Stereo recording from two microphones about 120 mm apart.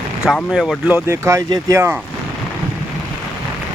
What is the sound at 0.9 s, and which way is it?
Speech, 20° right (ahead or behind).